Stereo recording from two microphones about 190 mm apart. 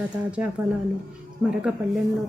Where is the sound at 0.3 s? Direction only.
5° right (ahead or behind).